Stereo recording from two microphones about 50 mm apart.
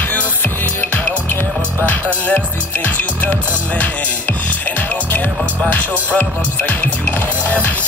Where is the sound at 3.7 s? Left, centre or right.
Left.